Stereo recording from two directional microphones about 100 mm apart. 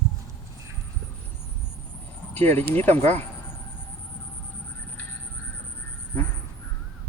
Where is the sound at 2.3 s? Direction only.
20° left (ahead or behind).